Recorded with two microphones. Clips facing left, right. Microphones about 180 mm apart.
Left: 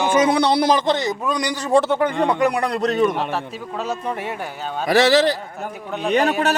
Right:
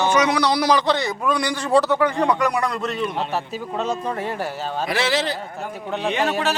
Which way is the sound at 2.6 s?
35° left (ahead or behind).